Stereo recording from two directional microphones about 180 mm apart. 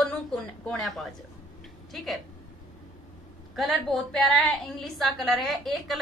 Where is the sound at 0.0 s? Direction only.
5° left (ahead or behind).